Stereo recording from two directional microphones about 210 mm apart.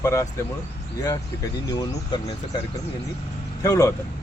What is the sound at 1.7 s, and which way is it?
Speech, 20° left (ahead or behind).